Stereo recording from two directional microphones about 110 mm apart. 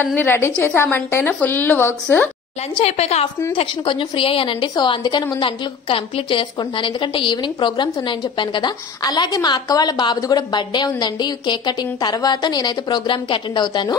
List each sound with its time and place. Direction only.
0.0 s a woman's voice: 20° left (ahead or behind)
2.8 s a woman's voice: 70° left (ahead or behind)
3.5 s a woman's voice: 50° left (ahead or behind)
6.6 s a woman's voice: 45° left (ahead or behind)